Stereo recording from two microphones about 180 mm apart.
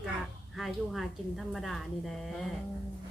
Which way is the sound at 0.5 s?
Centre (ahead or behind).